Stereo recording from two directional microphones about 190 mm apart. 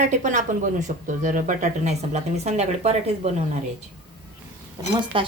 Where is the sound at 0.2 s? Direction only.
40° right (ahead or behind).